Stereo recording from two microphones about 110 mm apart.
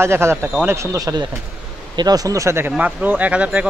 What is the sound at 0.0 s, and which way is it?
Speech, 25° right (ahead or behind).